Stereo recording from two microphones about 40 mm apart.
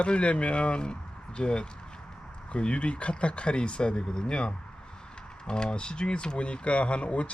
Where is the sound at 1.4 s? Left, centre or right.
Left.